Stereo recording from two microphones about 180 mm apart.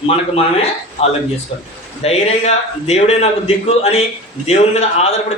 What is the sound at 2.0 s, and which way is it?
Speech, 35° left (ahead or behind).